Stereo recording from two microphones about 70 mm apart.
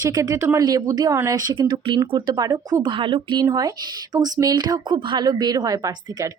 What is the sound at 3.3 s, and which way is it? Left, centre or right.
Speech, right.